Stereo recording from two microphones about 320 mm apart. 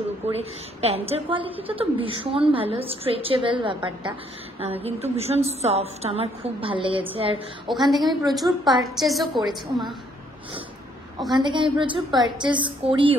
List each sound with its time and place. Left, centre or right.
0.4 s a woman's voice: centre
7.6 s a woman's voice: centre
11.3 s a woman's voice: centre